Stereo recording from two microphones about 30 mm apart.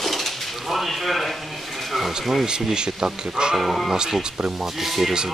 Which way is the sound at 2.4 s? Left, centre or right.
Right.